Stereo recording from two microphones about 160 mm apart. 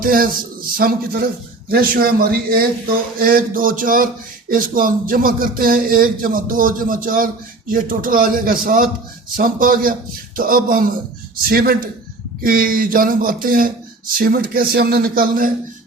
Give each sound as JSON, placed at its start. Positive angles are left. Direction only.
{"t": 0.0, "sound": "a man's voice", "side_deg": -65}